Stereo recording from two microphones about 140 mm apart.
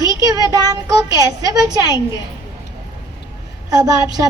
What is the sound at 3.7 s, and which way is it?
Speech, 25° right (ahead or behind).